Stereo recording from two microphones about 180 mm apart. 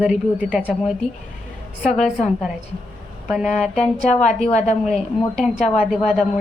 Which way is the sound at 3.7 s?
35° left (ahead or behind).